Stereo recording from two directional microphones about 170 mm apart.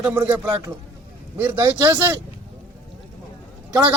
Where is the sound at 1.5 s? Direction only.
20° right (ahead or behind).